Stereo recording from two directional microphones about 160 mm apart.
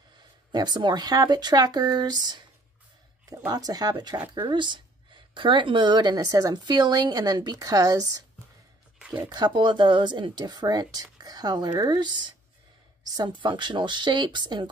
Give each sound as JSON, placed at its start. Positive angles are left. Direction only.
{"t": 0.5, "sound": "speech", "side_deg": -25}
{"t": 9.3, "sound": "speech", "side_deg": -30}